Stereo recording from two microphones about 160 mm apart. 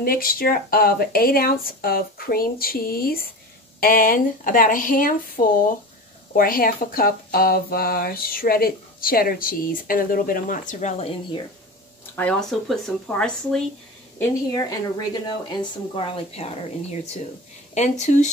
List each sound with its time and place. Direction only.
0.0 s speech: 65° left (ahead or behind)
10.7 s speech: 50° left (ahead or behind)
12.2 s speech: 5° left (ahead or behind)
14.5 s speech: 25° left (ahead or behind); by 16.5 s 40° left (ahead or behind)
17.7 s speech: 45° left (ahead or behind)